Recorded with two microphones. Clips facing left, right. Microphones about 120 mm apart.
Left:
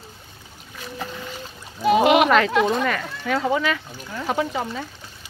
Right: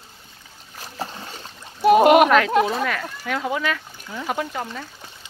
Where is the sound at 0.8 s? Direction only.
35° right (ahead or behind).